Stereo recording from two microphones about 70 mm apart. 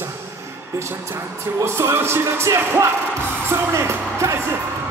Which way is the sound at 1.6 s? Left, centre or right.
Right.